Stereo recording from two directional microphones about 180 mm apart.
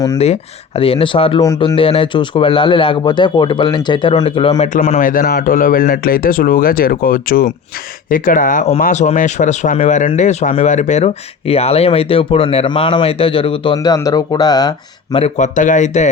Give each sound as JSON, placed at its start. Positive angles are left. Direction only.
{"t": 0.2, "sound": "a man's voice", "side_deg": 35}
{"t": 5.0, "sound": "a man's voice", "side_deg": 55}
{"t": 15.2, "sound": "speech", "side_deg": 45}